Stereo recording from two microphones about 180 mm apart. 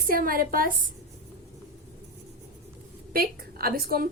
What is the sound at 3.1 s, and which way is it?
A woman's voice, 55° right (ahead or behind).